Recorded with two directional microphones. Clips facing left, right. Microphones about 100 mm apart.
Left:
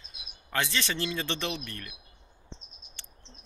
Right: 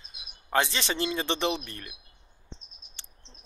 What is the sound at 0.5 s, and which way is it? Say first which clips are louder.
Speech: right 4 dB; 25° right (ahead or behind).